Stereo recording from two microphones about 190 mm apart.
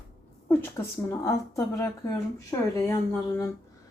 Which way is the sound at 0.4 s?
10° left (ahead or behind).